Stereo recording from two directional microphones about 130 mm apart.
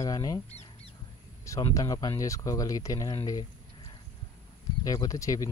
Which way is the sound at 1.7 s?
30° left (ahead or behind).